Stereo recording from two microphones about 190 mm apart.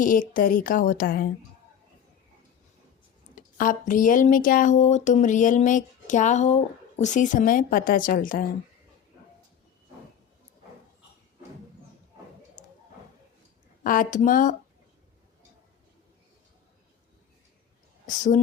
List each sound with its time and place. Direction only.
0.0 s speech: 45° left (ahead or behind)
3.3 s speech: 45° left (ahead or behind)
12.6 s a sound: 40° left (ahead or behind)
13.8 s speech: 45° left (ahead or behind)
18.0 s speech: 40° left (ahead or behind)